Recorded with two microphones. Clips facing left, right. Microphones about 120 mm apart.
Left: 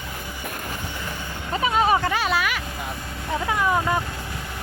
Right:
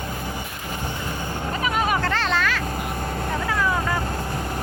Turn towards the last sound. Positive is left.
turn(degrees=20)  # may be behind; listen again after turning